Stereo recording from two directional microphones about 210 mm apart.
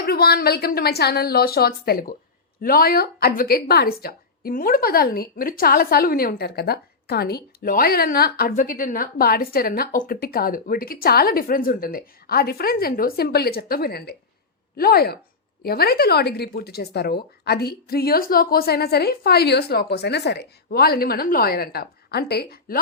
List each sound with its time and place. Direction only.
0.0 s a woman's voice: 50° left (ahead or behind)